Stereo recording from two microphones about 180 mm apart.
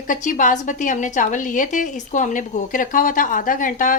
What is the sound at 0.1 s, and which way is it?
A woman's voice, 45° left (ahead or behind).